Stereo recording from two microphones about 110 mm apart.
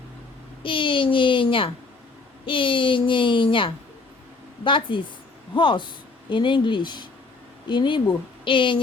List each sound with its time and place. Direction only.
0.6 s speech: 50° left (ahead or behind)